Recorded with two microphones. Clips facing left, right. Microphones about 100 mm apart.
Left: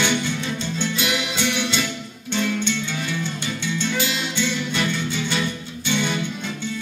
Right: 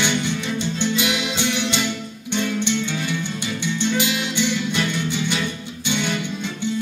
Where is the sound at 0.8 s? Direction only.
20° right (ahead or behind).